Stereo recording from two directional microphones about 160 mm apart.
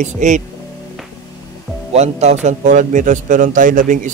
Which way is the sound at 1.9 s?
40° right (ahead or behind).